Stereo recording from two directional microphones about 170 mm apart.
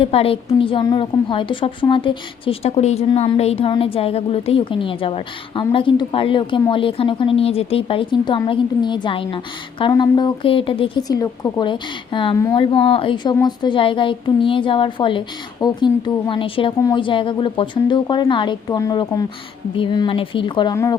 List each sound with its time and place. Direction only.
0.0 s a woman's voice: 35° left (ahead or behind)